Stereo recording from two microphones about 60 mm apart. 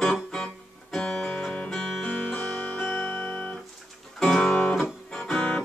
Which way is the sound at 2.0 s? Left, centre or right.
Left.